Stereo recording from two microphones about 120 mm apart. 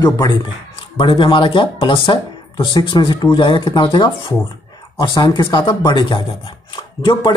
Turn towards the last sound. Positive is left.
turn(degrees=40)  # may be behind; listen again after turning